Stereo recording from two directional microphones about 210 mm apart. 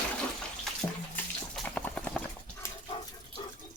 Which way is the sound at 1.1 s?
5° left (ahead or behind).